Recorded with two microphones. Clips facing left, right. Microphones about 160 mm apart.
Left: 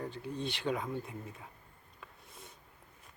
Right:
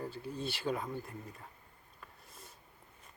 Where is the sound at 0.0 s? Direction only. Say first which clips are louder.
Left 1 dB; 5° right (ahead or behind).